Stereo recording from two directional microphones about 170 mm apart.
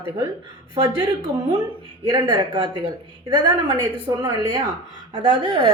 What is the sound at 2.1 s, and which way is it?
A woman's voice, 25° right (ahead or behind).